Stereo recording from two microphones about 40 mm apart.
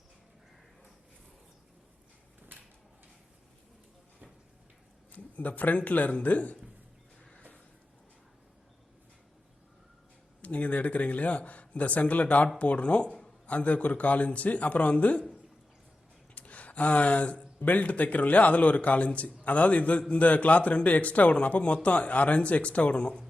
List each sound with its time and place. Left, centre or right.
5.1 s a man's voice: left
10.4 s a man's voice: left
16.3 s a sound: left
17.6 s a man's voice: left